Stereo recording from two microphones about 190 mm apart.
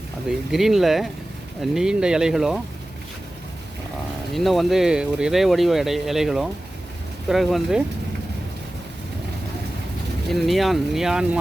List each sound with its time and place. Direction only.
0.3 s speech: centre (ahead or behind)
4.4 s speech: centre (ahead or behind)
10.2 s speech: centre (ahead or behind)